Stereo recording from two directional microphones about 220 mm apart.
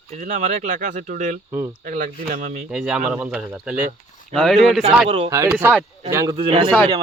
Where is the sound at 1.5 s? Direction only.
10° right (ahead or behind).